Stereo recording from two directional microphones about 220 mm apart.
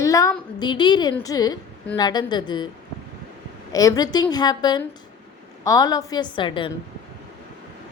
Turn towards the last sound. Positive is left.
turn(degrees=20)  # may be behind; listen again after turning